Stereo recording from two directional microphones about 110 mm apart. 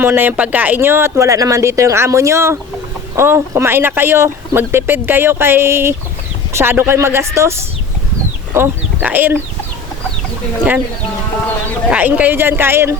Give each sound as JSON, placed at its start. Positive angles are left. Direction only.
{"t": 0.0, "sound": "speech", "side_deg": -20}
{"t": 9.0, "sound": "speech", "side_deg": -15}
{"t": 11.9, "sound": "speech", "side_deg": -15}